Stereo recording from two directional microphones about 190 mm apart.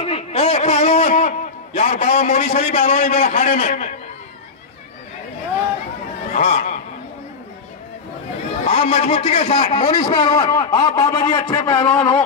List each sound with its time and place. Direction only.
0.0 s a sound: 35° left (ahead or behind)
1.8 s a man's voice: 35° left (ahead or behind)
6.3 s speech: 45° left (ahead or behind)
8.6 s a man's voice: 35° left (ahead or behind); by 12.0 s 15° left (ahead or behind)